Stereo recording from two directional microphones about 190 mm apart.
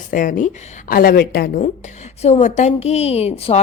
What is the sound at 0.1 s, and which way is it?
A woman's voice, 45° left (ahead or behind).